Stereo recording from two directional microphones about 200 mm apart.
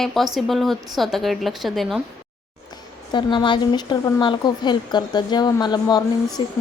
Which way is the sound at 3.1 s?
25° left (ahead or behind).